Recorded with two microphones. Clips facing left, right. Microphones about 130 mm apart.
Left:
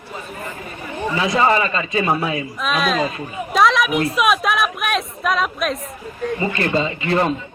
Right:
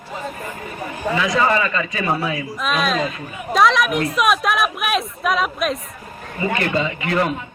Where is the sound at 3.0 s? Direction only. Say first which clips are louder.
Left 2 dB; 35° left (ahead or behind).